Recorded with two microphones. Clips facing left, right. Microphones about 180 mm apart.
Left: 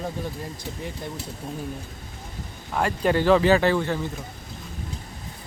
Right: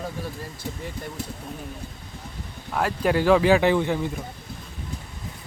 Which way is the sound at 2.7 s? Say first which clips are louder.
Even; 5° right (ahead or behind).